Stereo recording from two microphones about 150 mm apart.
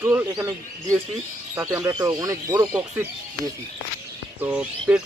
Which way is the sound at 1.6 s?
20° right (ahead or behind).